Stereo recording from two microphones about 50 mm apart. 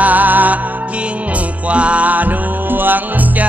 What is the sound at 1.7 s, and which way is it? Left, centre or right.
Music, right.